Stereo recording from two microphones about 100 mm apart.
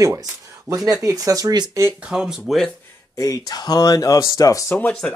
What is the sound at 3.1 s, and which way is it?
Speech, 35° left (ahead or behind).